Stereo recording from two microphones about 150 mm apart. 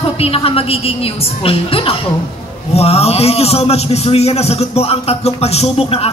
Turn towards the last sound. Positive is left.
turn(degrees=40)  # may be behind; listen again after turning